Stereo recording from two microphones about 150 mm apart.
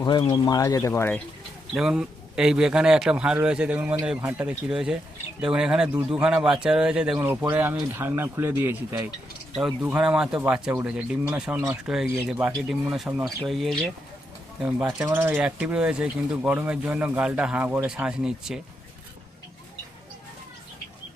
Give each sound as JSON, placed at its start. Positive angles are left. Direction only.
{"t": 0.0, "sound": "speech", "side_deg": 30}
{"t": 1.7, "sound": "a man's voice", "side_deg": -5}
{"t": 11.5, "sound": "speech", "side_deg": -15}
{"t": 13.1, "sound": "speech", "side_deg": -15}
{"t": 13.4, "sound": "a man's voice", "side_deg": 0}